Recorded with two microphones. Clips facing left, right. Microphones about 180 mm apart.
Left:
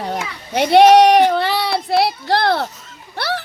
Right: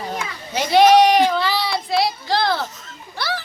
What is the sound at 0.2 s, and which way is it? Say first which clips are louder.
Child singing: left 5 dB; 60° left (ahead or behind).